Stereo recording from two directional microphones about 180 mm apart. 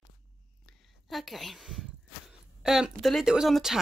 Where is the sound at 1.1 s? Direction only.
Centre (ahead or behind).